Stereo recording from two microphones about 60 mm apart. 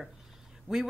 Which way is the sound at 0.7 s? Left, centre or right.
Right.